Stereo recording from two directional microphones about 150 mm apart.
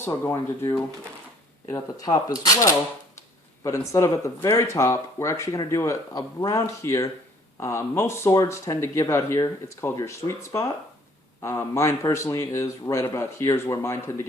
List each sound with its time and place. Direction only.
0.0 s speech: 20° left (ahead or behind)